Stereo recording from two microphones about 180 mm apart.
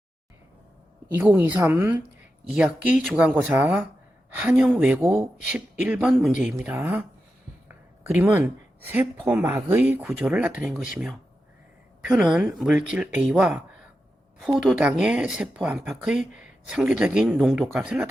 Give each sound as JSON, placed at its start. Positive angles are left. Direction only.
{"t": 1.0, "sound": "speech", "side_deg": -10}
{"t": 8.1, "sound": "speech", "side_deg": -10}